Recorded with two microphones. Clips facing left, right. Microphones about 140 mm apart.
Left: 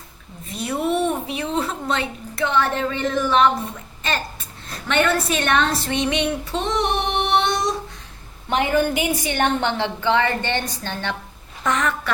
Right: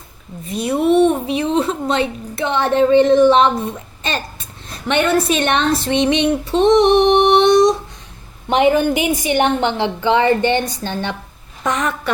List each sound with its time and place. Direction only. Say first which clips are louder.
0.5 s a woman's voice: right 8 dB; 15° right (ahead or behind)